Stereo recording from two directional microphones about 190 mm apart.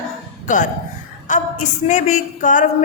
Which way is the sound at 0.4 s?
40° left (ahead or behind).